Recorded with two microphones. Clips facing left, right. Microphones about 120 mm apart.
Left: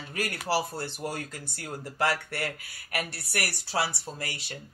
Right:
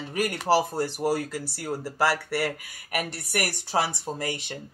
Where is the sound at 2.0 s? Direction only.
10° right (ahead or behind).